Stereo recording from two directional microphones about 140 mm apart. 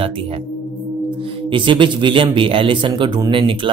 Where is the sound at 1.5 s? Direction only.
35° right (ahead or behind).